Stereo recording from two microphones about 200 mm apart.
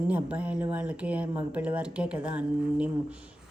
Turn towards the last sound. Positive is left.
turn(degrees=-5)  # may be behind; listen again after turning